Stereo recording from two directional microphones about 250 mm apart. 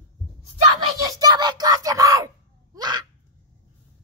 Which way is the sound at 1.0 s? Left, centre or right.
Centre.